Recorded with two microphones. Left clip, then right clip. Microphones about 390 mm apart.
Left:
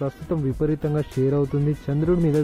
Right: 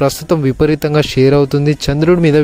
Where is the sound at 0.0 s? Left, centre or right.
Right.